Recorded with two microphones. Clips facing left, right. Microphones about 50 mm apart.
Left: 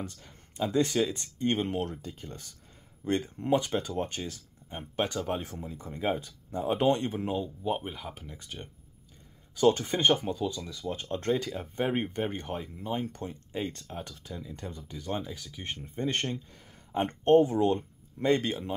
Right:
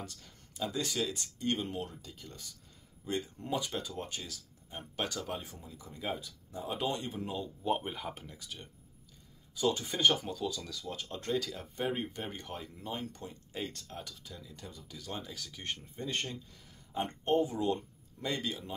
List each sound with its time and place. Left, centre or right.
0.0 s a sound: left
0.7 s speech: left
1.6 s speech: left
2.0 s speech: left
5.4 s speech: left
5.7 s speech: left
7.6 s speech: centre
8.4 s speech: left
9.6 s speech: left
9.9 s speech: left
12.5 s speech: centre
14.0 s speech: left
15.2 s speech: centre
15.8 s speech: left